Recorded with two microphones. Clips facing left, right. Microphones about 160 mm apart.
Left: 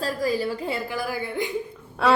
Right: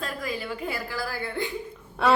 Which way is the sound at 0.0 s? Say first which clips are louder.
Left 8 dB; 35° left (ahead or behind).